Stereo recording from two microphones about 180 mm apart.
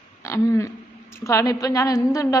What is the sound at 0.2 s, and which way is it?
A woman's voice, 15° left (ahead or behind).